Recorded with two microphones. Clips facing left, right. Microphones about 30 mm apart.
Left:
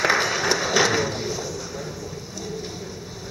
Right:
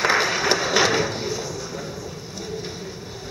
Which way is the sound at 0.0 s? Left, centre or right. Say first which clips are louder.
Right 1 dB; centre.